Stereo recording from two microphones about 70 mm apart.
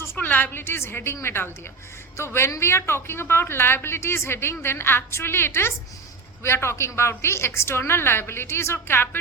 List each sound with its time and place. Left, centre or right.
0.2 s a woman's voice: left